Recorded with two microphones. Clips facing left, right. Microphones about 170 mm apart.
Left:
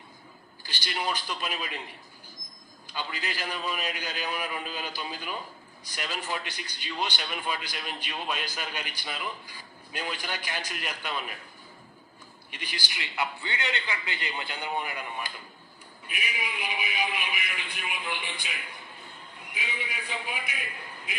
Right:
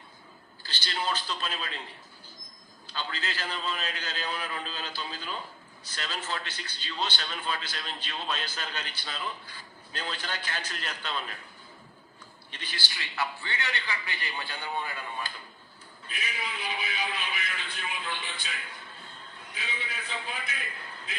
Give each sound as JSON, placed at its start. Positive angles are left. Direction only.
{"t": 0.6, "sound": "a man's voice", "side_deg": 15}
{"t": 2.8, "sound": "a man's voice", "side_deg": 15}
{"t": 12.5, "sound": "a man's voice", "side_deg": 10}